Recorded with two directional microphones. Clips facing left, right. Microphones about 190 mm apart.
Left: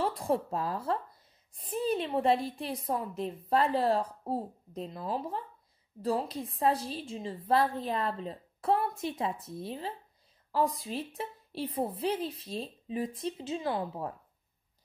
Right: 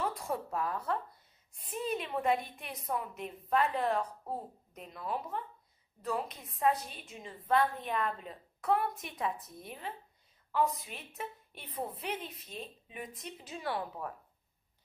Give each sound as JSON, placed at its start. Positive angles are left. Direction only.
{"t": 0.0, "sound": "a woman's voice", "side_deg": 30}